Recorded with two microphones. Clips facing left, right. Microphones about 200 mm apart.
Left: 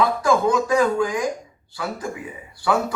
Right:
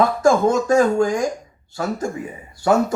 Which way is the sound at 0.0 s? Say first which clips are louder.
Right 3 dB; 45° right (ahead or behind).